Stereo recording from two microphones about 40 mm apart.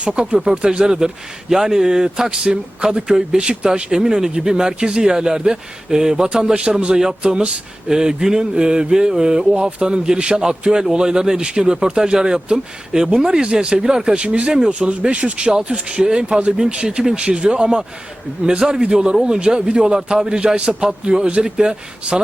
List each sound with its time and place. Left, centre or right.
0.0 s a man's voice: right
7.9 s a sound: centre
9.5 s speech: right
9.8 s a man's voice: centre
19.2 s a sound: centre
20.7 s a man's voice: right